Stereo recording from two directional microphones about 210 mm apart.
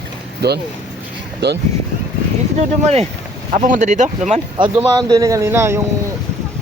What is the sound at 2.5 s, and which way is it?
Speech, 30° right (ahead or behind).